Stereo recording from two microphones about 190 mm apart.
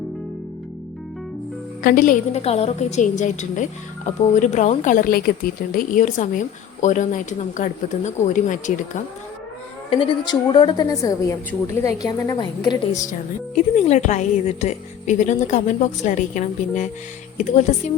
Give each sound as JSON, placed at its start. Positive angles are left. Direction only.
{"t": 1.8, "sound": "a woman's voice", "side_deg": 45}
{"t": 9.9, "sound": "a woman's voice", "side_deg": 25}
{"t": 13.7, "sound": "a woman's voice", "side_deg": 35}